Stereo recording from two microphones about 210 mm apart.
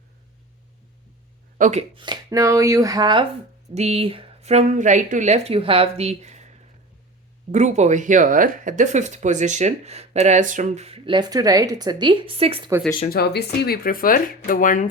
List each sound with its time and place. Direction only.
1.5 s speech: 35° right (ahead or behind)
2.0 s chopping: 20° right (ahead or behind)
3.8 s speech: 30° right (ahead or behind)
7.5 s speech: 35° right (ahead or behind)
13.1 s speech: 50° left (ahead or behind)